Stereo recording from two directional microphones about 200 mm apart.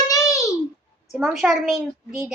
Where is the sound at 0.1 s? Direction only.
15° left (ahead or behind).